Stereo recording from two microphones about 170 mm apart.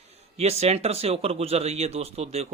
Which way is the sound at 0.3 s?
40° right (ahead or behind).